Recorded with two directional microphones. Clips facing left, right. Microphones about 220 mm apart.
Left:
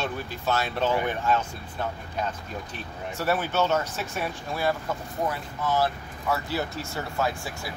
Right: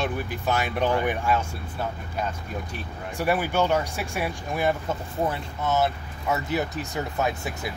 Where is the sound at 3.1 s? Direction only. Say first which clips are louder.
Right 2 dB; 15° right (ahead or behind).